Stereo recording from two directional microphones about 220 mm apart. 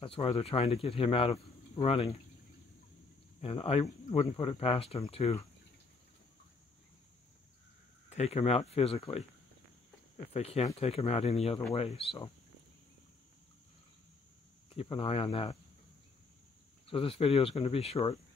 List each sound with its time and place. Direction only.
0.0 s speech: 25° left (ahead or behind)
3.3 s speech: 25° left (ahead or behind)
8.1 s speech: 30° left (ahead or behind)
10.3 s speech: 30° left (ahead or behind)
14.7 s speech: 25° left (ahead or behind)
16.8 s speech: 25° left (ahead or behind)